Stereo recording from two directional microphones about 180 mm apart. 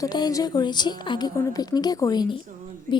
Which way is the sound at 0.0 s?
20° left (ahead or behind).